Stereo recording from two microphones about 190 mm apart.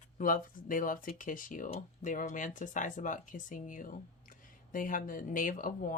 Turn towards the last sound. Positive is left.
turn(degrees=45)  # may be behind; listen again after turning